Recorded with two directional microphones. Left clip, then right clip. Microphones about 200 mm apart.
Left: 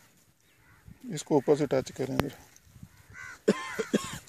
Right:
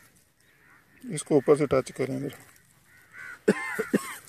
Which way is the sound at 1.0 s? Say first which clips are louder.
Right 3 dB; 5° right (ahead or behind).